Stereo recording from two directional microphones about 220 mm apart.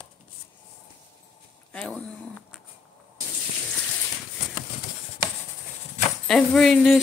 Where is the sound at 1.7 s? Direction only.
5° left (ahead or behind).